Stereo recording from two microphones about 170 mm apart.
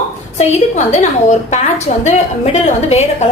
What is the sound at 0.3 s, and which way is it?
A woman's voice, 45° left (ahead or behind).